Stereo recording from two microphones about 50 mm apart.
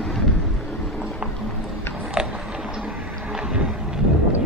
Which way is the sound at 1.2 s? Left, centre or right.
Right.